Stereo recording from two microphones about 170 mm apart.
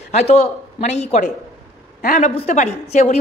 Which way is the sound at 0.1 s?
40° left (ahead or behind).